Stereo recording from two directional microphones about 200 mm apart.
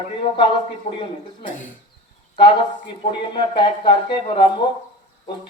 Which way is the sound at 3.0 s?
25° left (ahead or behind).